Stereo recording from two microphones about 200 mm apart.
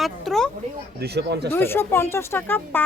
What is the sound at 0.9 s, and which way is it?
Speech, 55° right (ahead or behind).